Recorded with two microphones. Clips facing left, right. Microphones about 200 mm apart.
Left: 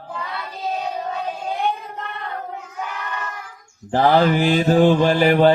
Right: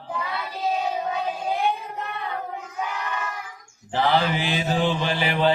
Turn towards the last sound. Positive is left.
turn(degrees=50)  # may be behind; listen again after turning